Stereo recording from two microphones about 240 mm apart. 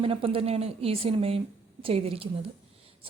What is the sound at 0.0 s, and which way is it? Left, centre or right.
Speech, right.